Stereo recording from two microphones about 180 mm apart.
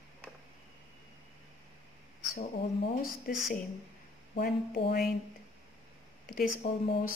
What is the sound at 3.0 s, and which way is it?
Speech, 50° left (ahead or behind).